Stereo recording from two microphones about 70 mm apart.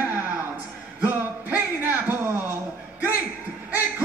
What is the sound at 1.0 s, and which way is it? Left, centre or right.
Speech, right.